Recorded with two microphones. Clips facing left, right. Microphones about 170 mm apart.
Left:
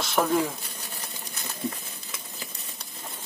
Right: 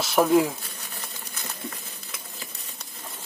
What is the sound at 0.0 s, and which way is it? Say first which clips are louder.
Speech: right 4 dB; 10° right (ahead or behind).